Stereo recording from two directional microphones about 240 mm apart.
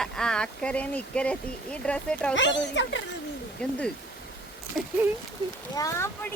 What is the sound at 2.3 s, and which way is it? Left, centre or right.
Speech, left.